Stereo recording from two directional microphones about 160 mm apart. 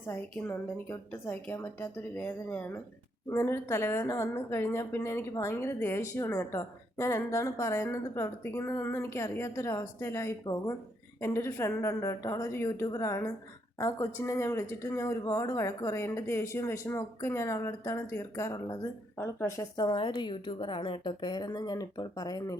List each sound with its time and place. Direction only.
0.1 s a woman's voice: 15° left (ahead or behind)